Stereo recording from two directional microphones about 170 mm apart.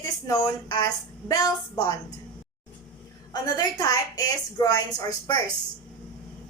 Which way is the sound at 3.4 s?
25° left (ahead or behind).